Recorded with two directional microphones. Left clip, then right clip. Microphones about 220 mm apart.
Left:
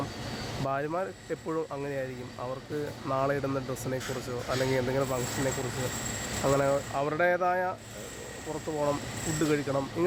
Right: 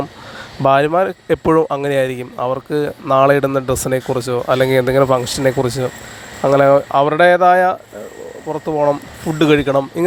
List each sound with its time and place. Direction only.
0.6 s speech: 45° right (ahead or behind)